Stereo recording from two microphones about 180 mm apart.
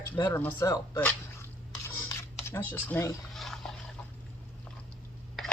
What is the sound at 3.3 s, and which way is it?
Dog, centre (ahead or behind).